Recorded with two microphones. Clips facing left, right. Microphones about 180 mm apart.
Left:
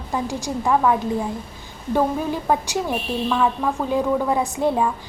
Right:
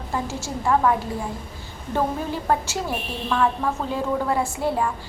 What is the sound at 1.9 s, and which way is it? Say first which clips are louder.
A woman's voice: left 3 dB; 15° left (ahead or behind).